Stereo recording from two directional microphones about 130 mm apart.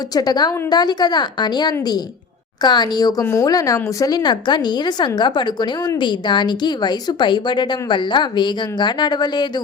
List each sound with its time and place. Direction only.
0.1 s speech: 30° left (ahead or behind)